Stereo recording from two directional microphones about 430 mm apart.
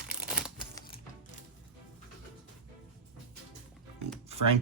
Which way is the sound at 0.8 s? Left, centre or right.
Centre.